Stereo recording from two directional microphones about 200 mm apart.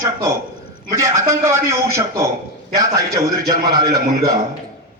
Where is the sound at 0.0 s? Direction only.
15° right (ahead or behind).